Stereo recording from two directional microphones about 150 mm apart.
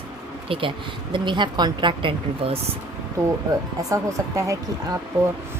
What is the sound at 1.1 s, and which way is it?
Speech, 30° right (ahead or behind).